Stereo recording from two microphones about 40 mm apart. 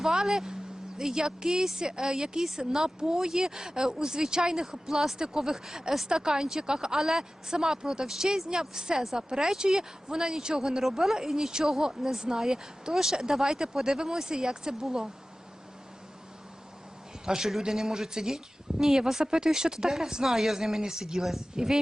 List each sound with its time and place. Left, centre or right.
0.0 s a woman's voice: centre
17.2 s a woman's voice: centre